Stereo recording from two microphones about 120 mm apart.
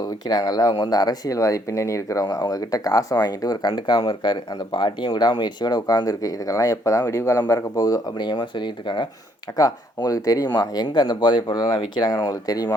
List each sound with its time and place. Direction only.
0.0 s speech: 35° left (ahead or behind)